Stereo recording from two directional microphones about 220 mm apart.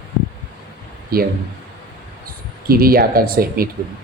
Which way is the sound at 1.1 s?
45° right (ahead or behind).